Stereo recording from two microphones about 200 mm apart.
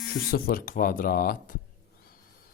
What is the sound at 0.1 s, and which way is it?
Speech, 50° left (ahead or behind).